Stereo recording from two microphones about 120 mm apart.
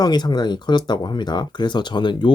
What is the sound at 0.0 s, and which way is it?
Speech, 35° left (ahead or behind).